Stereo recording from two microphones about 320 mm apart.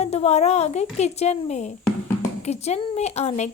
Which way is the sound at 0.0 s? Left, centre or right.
Centre.